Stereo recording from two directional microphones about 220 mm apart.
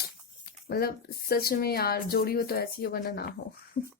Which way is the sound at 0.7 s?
45° left (ahead or behind).